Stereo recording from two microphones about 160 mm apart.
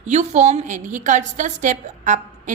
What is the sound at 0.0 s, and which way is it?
A woman's voice, 45° right (ahead or behind).